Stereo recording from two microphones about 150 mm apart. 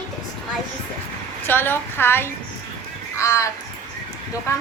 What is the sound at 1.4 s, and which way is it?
A woman's voice, 15° left (ahead or behind).